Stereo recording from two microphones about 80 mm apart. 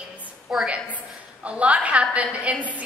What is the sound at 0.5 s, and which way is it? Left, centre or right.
A woman's voice, centre.